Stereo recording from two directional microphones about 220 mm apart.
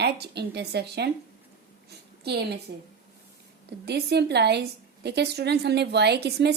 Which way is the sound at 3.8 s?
50° right (ahead or behind).